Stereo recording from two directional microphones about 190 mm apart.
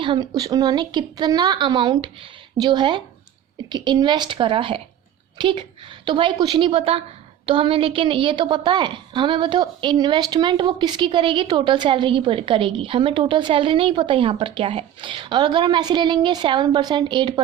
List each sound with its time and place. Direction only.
0.0 s a woman's voice: 25° right (ahead or behind)